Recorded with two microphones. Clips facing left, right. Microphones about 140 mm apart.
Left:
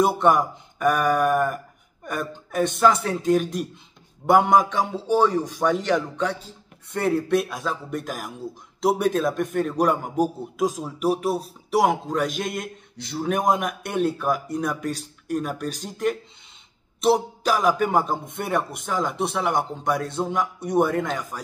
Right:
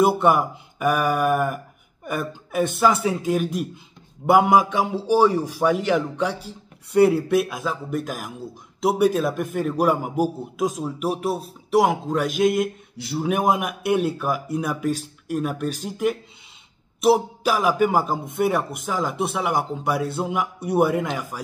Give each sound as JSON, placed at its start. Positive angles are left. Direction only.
{"t": 0.0, "sound": "a man's voice", "side_deg": -5}